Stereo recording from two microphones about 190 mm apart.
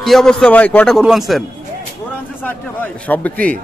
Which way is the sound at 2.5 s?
10° left (ahead or behind).